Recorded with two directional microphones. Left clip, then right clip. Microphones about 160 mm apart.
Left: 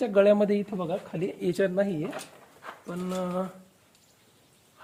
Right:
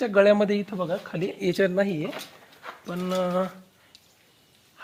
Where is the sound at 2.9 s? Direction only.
40° right (ahead or behind).